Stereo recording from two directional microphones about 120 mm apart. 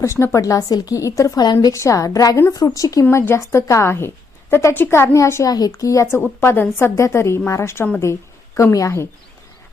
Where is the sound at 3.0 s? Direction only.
20° left (ahead or behind).